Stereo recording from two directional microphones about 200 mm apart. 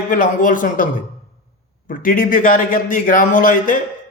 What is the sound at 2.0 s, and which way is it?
Speech, 45° left (ahead or behind).